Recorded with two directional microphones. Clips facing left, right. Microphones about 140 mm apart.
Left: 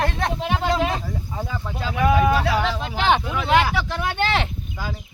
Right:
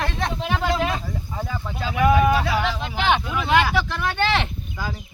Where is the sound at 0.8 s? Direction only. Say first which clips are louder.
Left 1 dB; 15° left (ahead or behind).